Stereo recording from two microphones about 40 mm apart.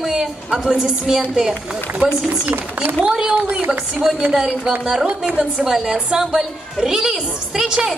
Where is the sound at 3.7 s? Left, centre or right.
Centre.